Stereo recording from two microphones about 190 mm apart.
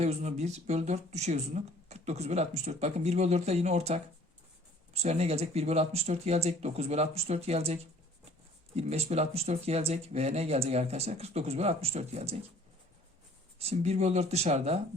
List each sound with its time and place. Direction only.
0.0 s speech: 35° right (ahead or behind)
5.0 s speech: 35° right (ahead or behind)
13.6 s speech: 35° right (ahead or behind)